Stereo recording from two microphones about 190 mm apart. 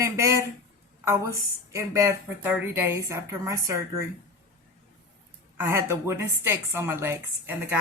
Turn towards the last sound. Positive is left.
turn(degrees=-10)  # may be behind; listen again after turning